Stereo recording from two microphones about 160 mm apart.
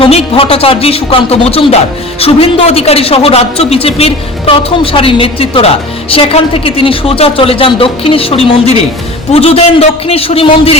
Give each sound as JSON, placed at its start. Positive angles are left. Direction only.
{"t": 0.0, "sound": "speech", "side_deg": 35}